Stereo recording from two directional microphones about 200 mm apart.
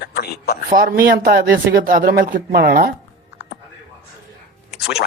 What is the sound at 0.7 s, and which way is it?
Speech, 45° right (ahead or behind).